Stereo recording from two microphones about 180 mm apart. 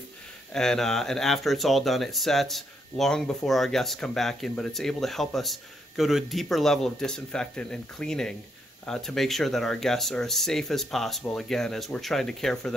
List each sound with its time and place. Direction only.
0.5 s speech: 5° left (ahead or behind)